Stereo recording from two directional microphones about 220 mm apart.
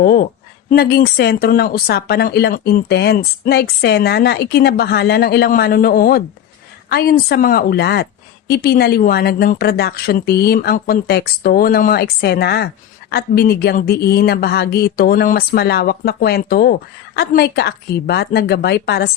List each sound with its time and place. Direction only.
0.0 s a woman's voice: 40° left (ahead or behind)